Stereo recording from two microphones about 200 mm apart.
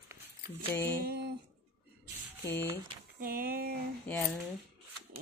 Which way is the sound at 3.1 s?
45° right (ahead or behind).